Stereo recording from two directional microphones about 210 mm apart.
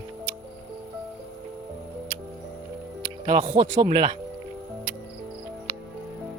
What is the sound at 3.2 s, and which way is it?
Speech, 25° right (ahead or behind).